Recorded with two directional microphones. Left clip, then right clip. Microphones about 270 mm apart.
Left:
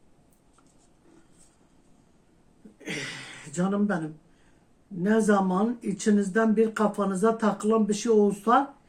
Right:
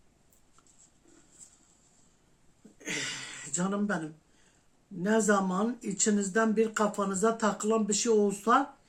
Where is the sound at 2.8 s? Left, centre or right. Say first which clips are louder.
Left 1 dB; centre.